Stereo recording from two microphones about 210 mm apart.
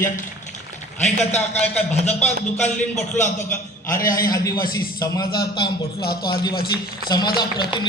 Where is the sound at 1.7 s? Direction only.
10° left (ahead or behind).